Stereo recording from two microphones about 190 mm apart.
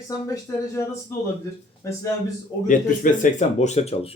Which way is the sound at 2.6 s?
40° left (ahead or behind).